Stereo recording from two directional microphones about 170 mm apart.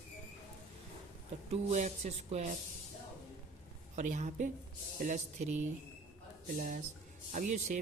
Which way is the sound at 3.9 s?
45° right (ahead or behind).